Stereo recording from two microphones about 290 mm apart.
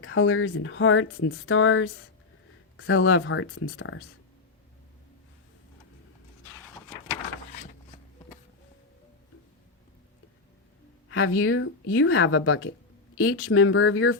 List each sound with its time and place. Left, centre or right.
0.0 s speech: left
11.1 s speech: left